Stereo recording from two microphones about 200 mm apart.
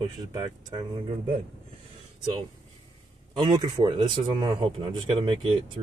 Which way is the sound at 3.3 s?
25° right (ahead or behind).